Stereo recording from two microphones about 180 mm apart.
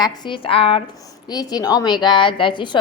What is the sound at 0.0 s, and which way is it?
A woman's voice, 20° left (ahead or behind).